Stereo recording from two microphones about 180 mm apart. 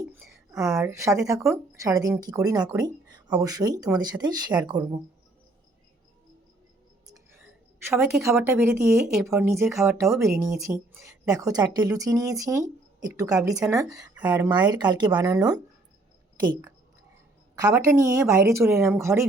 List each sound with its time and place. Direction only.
0.0 s a sound: 5° right (ahead or behind)
0.6 s speech: 20° right (ahead or behind)
8.2 s speech: 15° right (ahead or behind)